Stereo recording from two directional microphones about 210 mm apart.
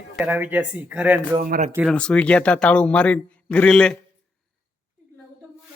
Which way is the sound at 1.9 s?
5° left (ahead or behind).